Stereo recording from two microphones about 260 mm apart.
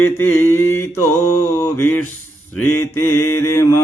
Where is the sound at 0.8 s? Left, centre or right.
Left.